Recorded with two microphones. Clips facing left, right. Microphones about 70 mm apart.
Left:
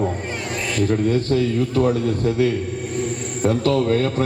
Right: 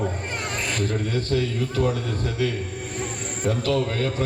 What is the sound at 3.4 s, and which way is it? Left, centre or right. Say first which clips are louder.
Speech: left 5 dB; left.